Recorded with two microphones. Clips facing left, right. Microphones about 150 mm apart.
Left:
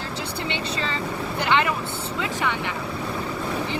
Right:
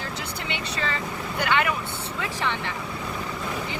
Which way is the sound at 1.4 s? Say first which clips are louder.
Left 2 dB; 25° left (ahead or behind).